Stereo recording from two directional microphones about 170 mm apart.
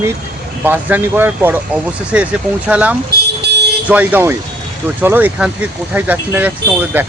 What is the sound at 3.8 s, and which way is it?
Speech, 10° right (ahead or behind).